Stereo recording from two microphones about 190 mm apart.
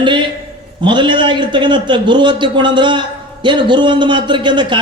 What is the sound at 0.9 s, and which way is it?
A man's voice, 25° right (ahead or behind).